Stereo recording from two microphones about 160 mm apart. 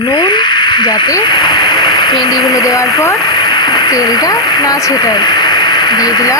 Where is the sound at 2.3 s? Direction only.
Centre (ahead or behind).